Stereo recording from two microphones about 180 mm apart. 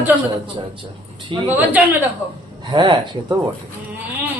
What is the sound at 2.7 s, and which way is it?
Speech, 25° right (ahead or behind).